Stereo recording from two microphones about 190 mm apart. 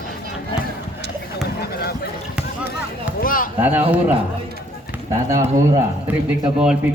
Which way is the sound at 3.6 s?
10° right (ahead or behind).